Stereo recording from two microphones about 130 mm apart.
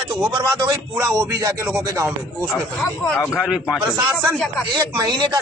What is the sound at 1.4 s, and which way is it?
Speech, 25° right (ahead or behind).